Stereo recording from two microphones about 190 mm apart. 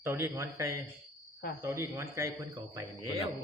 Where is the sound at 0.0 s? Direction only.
15° right (ahead or behind).